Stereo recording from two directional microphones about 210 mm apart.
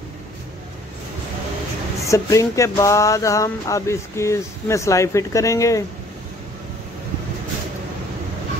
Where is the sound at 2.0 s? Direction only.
15° left (ahead or behind).